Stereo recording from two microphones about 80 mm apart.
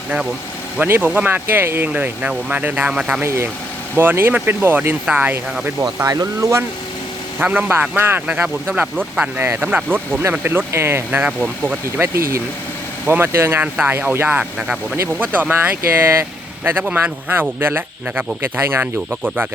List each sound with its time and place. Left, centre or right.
0.8 s speech: right
1.9 s speech: centre
3.2 s speech: right
6.0 s speech: right
7.3 s speech: right
11.3 s speech: centre
11.9 s speech: right